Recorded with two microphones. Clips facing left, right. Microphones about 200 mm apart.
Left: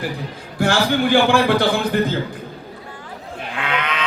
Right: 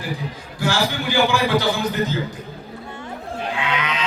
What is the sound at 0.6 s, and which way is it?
A man's voice, 55° left (ahead or behind).